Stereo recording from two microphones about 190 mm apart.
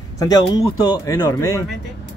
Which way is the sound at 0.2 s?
20° left (ahead or behind).